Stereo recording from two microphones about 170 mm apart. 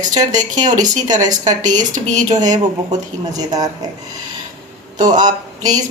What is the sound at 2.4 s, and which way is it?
Speech, 25° right (ahead or behind).